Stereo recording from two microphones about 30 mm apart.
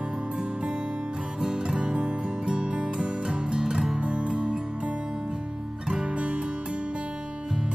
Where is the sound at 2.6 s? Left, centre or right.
Right.